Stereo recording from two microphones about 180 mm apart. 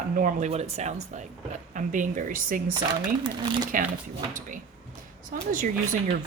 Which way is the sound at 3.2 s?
25° right (ahead or behind).